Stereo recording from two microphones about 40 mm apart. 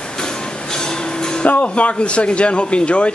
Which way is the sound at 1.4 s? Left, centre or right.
Left.